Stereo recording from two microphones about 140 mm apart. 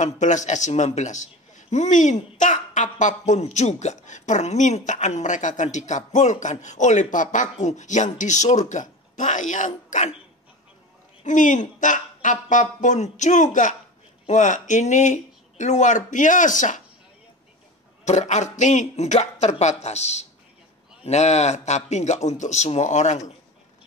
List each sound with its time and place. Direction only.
0.0 s a man's voice: 60° left (ahead or behind)
11.2 s a man's voice: 65° left (ahead or behind)
18.0 s a man's voice: 55° left (ahead or behind)